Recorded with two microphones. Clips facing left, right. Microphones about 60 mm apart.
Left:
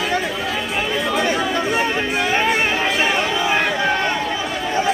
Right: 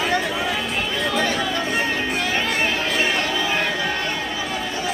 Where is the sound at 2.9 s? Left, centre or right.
Left.